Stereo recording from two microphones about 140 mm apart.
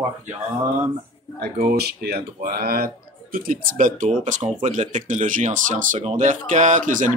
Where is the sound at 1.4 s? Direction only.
90° right.